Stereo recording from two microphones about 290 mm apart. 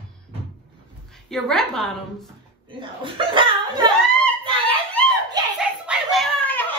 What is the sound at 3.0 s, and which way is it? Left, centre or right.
Speech, centre.